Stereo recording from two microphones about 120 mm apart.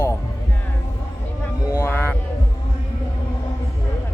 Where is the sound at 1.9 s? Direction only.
15° left (ahead or behind).